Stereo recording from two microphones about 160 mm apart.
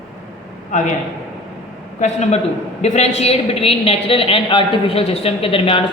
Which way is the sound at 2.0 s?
45° left (ahead or behind).